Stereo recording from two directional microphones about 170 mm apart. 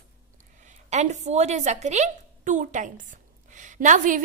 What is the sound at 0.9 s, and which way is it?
A woman's voice, 45° right (ahead or behind).